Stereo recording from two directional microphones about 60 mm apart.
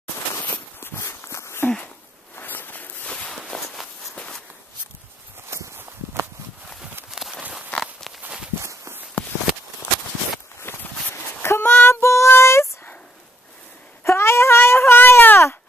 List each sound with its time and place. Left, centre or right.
0.7 s walk: left
2.3 s a sound: left
3.1 s walk: centre
3.3 s walk: centre
4.1 s walk: centre
5.5 s walk: right
7.1 s a sound: centre
8.5 s walk: right
10.7 s a sound: left
11.4 s female singing: left
14.0 s baby cry: left